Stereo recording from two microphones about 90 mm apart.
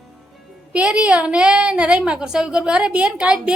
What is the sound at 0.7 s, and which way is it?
Speech, 15° right (ahead or behind).